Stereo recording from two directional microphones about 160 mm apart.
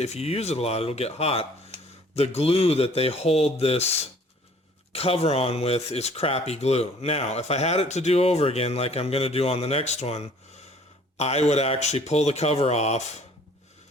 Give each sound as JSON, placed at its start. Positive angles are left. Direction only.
{"t": 0.0, "sound": "speech", "side_deg": 40}
{"t": 4.9, "sound": "speech", "side_deg": 40}